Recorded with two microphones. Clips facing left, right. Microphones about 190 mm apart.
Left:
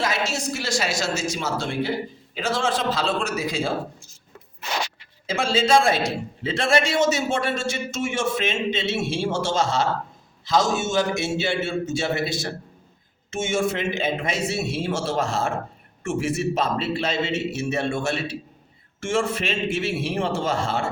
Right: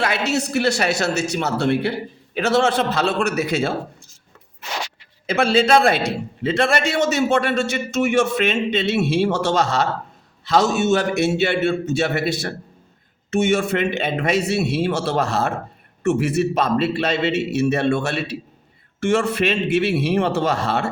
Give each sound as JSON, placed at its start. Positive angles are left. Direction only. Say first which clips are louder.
{"t": 0.0, "sound": "a man's voice", "louder": "right 4 dB", "side_deg": -65}
{"t": 5.2, "sound": "a man's voice", "louder": "right 5 dB", "side_deg": -65}